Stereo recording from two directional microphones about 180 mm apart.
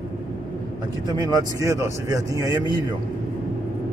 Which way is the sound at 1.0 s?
20° right (ahead or behind).